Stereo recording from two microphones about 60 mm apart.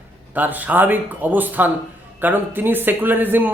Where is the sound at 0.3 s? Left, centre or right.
Right.